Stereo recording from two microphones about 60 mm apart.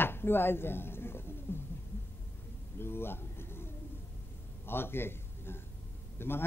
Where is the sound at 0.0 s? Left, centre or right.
Left.